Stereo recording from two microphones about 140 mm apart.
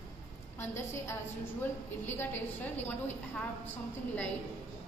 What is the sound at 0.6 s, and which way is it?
A woman's voice, 20° left (ahead or behind).